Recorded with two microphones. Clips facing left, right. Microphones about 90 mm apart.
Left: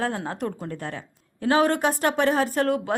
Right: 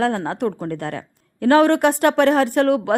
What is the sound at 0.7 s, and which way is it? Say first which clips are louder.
A woman's voice: right 6 dB; 65° right (ahead or behind).